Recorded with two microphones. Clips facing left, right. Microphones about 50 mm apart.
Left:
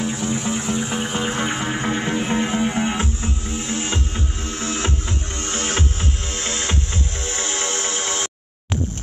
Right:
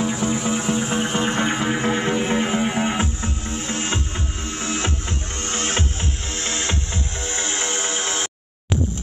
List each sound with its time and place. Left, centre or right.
0.0 s music: centre
1.0 s music: centre
5.5 s music: right
7.2 s a sound: right